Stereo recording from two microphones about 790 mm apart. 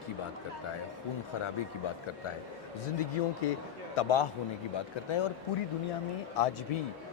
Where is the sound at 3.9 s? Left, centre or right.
Left.